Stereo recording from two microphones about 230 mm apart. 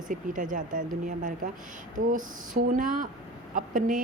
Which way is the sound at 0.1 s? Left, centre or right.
Right.